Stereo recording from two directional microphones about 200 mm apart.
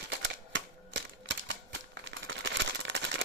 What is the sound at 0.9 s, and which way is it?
Typewriter, 60° right (ahead or behind).